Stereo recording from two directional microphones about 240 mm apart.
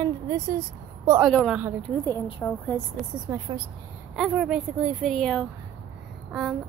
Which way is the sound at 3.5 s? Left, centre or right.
Centre.